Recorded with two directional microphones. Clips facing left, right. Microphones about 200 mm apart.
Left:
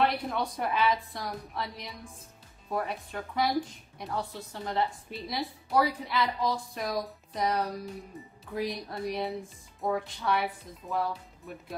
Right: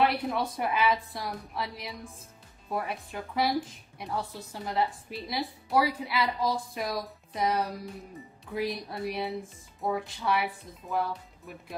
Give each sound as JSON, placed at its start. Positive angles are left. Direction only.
{"t": 0.0, "sound": "a woman's voice", "side_deg": -5}